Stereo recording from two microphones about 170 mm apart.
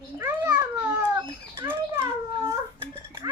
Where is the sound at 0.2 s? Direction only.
15° right (ahead or behind).